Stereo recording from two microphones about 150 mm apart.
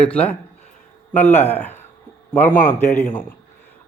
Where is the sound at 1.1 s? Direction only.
15° left (ahead or behind).